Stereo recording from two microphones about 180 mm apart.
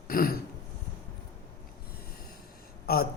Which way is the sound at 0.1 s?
55° left (ahead or behind).